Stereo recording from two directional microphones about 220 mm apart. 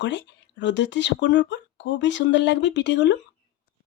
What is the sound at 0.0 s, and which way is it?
Speech, 55° left (ahead or behind).